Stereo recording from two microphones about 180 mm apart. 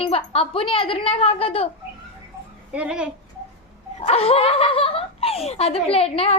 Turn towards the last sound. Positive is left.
turn(degrees=35)  # may be behind; listen again after turning